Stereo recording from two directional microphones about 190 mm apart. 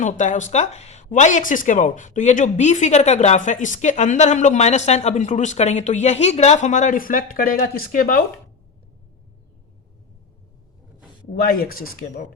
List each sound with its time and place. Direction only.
0.0 s speech: 40° left (ahead or behind)
11.4 s speech: 50° left (ahead or behind)